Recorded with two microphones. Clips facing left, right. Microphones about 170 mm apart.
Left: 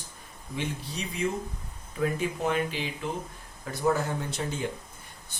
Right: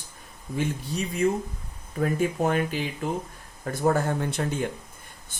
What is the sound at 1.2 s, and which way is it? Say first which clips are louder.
Speech: right 5 dB; 50° right (ahead or behind).